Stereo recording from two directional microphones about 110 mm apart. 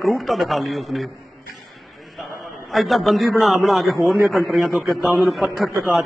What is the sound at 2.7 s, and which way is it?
A man's voice, centre (ahead or behind).